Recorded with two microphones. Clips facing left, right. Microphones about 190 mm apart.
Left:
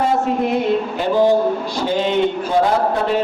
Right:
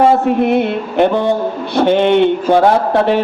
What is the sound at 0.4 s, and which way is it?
A man's voice, 65° right (ahead or behind).